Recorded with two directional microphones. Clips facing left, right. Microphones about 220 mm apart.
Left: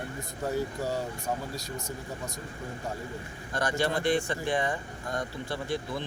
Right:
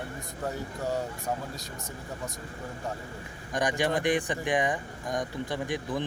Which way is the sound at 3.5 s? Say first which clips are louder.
Right 1 dB; 15° right (ahead or behind).